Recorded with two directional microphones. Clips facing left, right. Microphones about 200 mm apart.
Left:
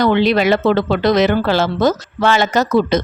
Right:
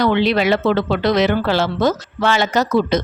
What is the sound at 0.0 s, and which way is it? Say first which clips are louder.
Speech: left 2 dB; 45° left (ahead or behind).